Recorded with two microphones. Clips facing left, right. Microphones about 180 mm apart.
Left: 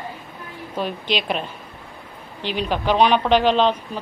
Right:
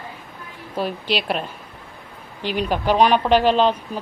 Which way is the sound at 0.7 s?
5° right (ahead or behind).